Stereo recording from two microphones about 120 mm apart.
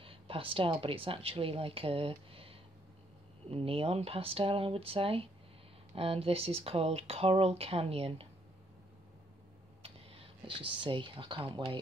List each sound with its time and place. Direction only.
0.0 s speech: 50° right (ahead or behind)
9.8 s speech: 50° right (ahead or behind)